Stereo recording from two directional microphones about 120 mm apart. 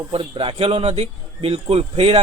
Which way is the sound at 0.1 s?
50° right (ahead or behind).